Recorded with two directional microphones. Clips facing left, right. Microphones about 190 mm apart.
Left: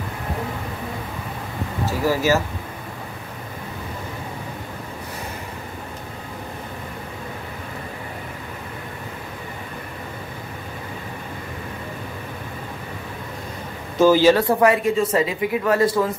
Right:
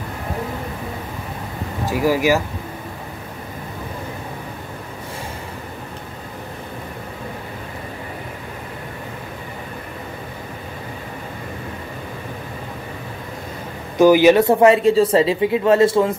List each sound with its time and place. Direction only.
1.9 s speech: 15° right (ahead or behind)
13.9 s speech: 15° right (ahead or behind)